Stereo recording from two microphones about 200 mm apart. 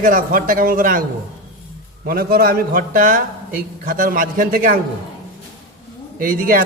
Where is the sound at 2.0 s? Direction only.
50° right (ahead or behind).